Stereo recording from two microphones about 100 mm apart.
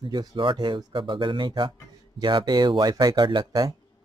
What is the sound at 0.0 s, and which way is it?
Speech, 45° right (ahead or behind).